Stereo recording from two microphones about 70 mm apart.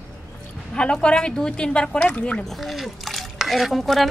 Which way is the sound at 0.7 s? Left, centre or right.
Centre.